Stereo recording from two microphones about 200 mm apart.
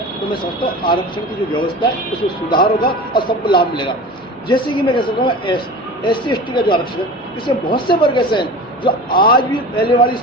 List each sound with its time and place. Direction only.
0.3 s speech: 25° left (ahead or behind)